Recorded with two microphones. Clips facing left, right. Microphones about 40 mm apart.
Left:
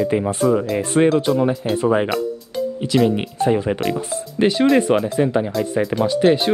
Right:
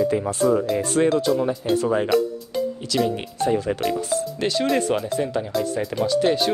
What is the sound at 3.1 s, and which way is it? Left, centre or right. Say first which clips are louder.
Speech: left 4 dB; left.